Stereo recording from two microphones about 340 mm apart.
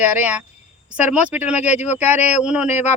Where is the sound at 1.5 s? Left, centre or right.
Centre.